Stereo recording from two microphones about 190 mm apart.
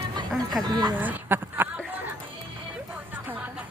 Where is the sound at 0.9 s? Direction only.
10° right (ahead or behind).